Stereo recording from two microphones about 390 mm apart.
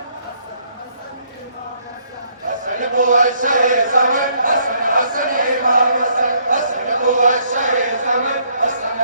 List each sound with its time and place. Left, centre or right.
2.6 s chant: centre